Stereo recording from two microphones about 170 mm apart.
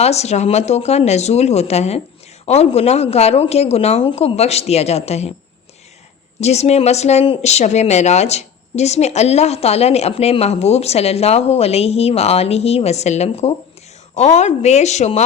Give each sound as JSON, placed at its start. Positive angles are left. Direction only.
{"t": 0.0, "sound": "speech", "side_deg": 40}
{"t": 6.4, "sound": "speech", "side_deg": 40}